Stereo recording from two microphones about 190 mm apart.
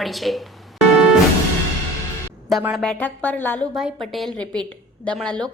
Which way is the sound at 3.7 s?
Centre (ahead or behind).